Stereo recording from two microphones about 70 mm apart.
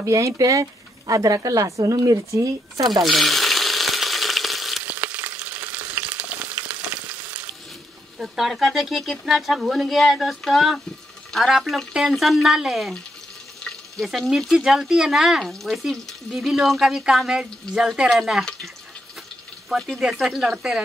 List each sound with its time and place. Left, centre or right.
0.0 s speech: right
2.9 s frying: centre
4.8 s frying: right
8.2 s speech: centre
19.7 s speech: centre